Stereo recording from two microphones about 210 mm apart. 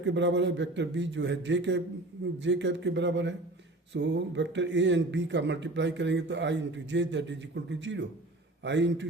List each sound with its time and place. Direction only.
0.0 s speech: 60° right (ahead or behind)